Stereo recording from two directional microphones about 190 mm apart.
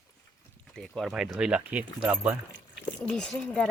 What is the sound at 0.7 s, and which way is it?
Speech, 5° left (ahead or behind).